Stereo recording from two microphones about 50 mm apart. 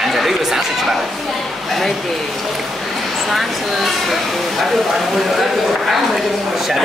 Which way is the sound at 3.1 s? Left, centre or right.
Centre.